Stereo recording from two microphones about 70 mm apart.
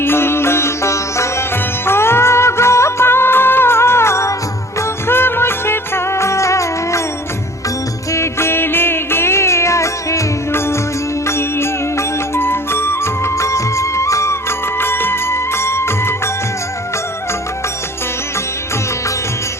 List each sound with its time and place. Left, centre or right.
0.0 s sitar: left
1.9 s music: left
8.1 s music: left
14.8 s music: left